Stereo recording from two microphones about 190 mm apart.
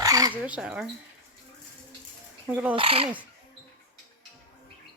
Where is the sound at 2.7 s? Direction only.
30° right (ahead or behind).